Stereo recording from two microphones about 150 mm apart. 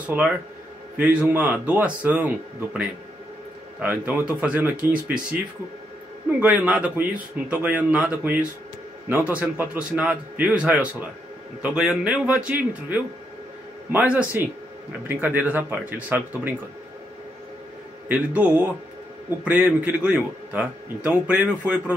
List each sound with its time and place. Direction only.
0.0 s speech: 10° right (ahead or behind)
6.4 s speech: 10° right (ahead or behind)
18.0 s speech: 10° right (ahead or behind)